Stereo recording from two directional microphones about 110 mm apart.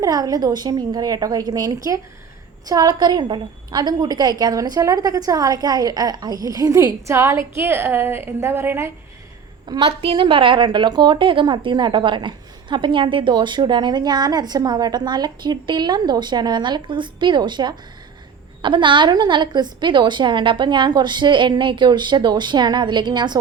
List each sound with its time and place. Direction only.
0.0 s a woman's voice: 35° right (ahead or behind)
9.6 s a woman's voice: 50° right (ahead or behind)